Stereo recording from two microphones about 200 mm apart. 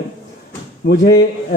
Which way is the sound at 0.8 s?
55° left (ahead or behind).